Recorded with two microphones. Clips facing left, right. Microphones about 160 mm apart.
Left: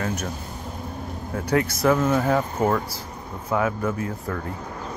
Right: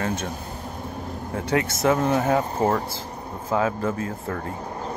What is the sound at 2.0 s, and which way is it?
Speech, 35° right (ahead or behind).